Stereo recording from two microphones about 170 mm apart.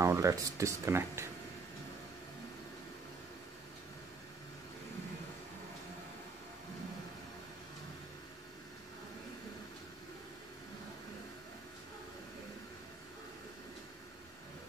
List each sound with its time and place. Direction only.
0.0 s speech: 15° right (ahead or behind)